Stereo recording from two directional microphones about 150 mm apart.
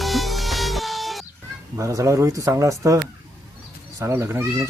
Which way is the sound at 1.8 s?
20° right (ahead or behind).